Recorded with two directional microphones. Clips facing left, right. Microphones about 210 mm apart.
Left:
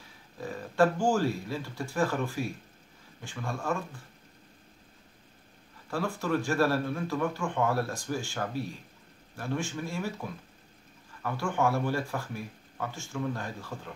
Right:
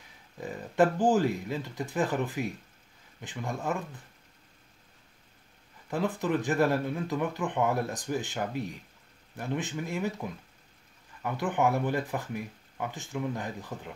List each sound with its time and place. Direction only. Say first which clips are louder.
0.4 s a man's voice: even; 20° right (ahead or behind)
5.9 s a man's voice: right 1 dB; 20° right (ahead or behind)
11.2 s speech: right 1 dB; 20° right (ahead or behind)